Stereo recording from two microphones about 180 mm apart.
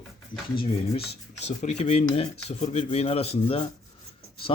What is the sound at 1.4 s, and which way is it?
Speech, 40° left (ahead or behind).